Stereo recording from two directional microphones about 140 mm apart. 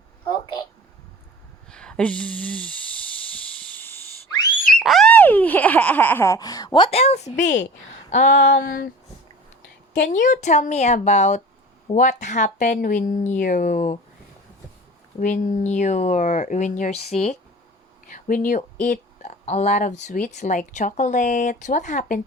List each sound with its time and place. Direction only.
1.7 s a sound: 5° left (ahead or behind)
4.8 s a sound: centre (ahead or behind)
5.1 s baby laughter: 10° left (ahead or behind); by 7.0 s 35° left (ahead or behind)
7.0 s speech: 50° left (ahead or behind); by 8.9 s 85° left
10.1 s speech: 65° left (ahead or behind)
15.2 s speech: 70° left (ahead or behind); by 17.3 s 50° left (ahead or behind)
18.0 s speech: 75° left (ahead or behind)